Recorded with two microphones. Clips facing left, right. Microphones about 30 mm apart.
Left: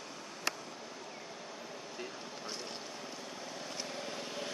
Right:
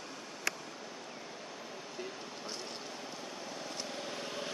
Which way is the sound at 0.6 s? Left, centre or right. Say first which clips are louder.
Even; centre.